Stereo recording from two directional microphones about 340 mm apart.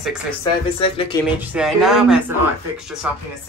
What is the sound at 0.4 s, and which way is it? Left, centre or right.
Speech, centre.